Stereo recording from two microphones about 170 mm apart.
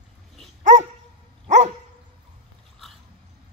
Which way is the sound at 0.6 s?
45° right (ahead or behind).